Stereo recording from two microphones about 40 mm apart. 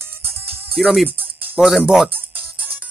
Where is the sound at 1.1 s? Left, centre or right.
Right.